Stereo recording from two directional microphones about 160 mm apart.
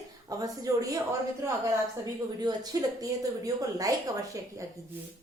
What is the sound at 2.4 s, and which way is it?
A woman's voice, 25° right (ahead or behind).